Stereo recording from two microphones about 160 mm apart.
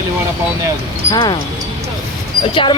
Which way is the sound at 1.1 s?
30° left (ahead or behind).